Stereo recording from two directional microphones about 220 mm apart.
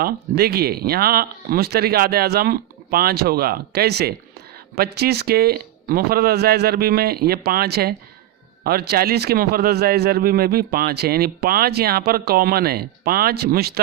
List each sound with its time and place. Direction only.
0.0 s speech: 45° right (ahead or behind)